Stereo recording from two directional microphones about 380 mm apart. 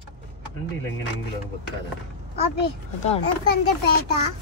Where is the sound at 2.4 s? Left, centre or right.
Centre.